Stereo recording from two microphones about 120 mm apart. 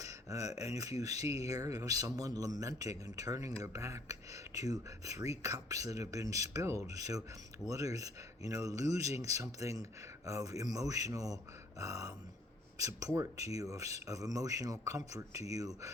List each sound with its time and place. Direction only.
0.0 s speech: 30° right (ahead or behind)
13.1 s speech: 25° right (ahead or behind)